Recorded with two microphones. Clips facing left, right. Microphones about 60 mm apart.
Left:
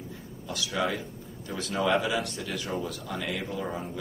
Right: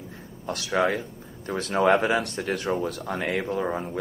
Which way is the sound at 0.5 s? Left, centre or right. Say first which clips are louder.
Right 6 dB; right.